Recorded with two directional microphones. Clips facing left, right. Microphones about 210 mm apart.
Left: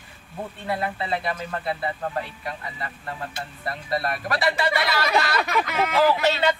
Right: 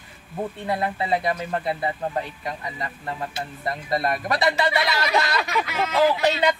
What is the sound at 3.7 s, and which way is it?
Speech, 20° right (ahead or behind).